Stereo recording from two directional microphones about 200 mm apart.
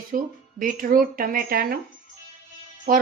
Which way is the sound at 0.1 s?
40° right (ahead or behind).